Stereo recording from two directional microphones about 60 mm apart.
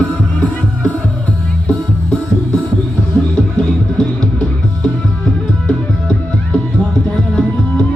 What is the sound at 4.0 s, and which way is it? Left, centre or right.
Music, centre.